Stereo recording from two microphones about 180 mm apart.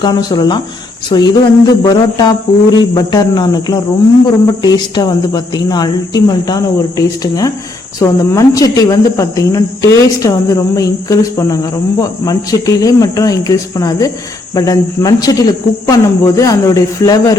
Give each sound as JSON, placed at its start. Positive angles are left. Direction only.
{"t": 0.0, "sound": "speech", "side_deg": 25}